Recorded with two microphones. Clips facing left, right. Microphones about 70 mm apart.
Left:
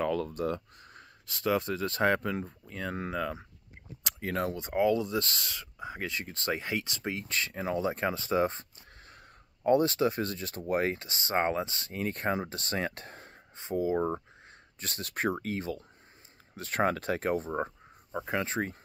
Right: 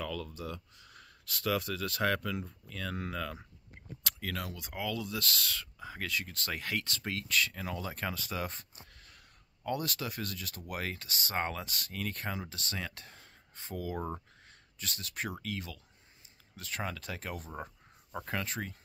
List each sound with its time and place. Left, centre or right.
0.0 s speech: left
1.2 s speech: left
13.6 s speech: left
14.8 s speech: left